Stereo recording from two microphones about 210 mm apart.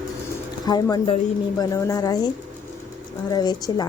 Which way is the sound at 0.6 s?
20° left (ahead or behind).